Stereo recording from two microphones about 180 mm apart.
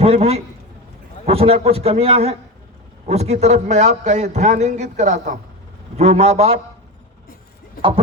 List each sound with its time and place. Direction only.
0.0 s a man's voice: 35° right (ahead or behind)